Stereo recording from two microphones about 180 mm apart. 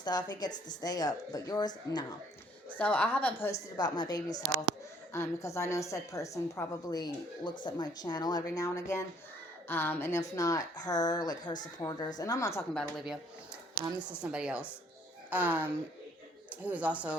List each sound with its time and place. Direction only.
0.0 s a woman's voice: 25° left (ahead or behind)
2.6 s a woman's voice: 10° left (ahead or behind)
3.8 s a woman's voice: 25° left (ahead or behind)
12.7 s speech: centre (ahead or behind)